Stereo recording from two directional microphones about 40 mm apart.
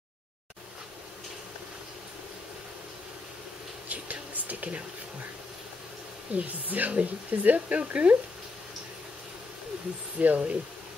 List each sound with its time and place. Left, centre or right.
3.9 s a sound: right
6.3 s a woman's voice: right
10.1 s a woman's voice: right